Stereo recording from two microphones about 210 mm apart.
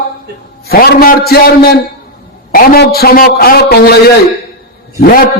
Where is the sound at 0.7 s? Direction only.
50° left (ahead or behind).